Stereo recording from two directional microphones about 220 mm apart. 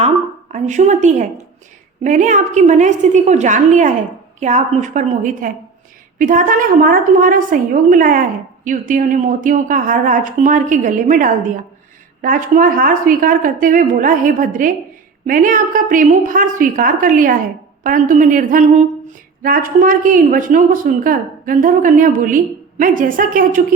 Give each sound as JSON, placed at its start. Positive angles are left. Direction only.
{"t": 0.5, "sound": "a woman's voice", "side_deg": -35}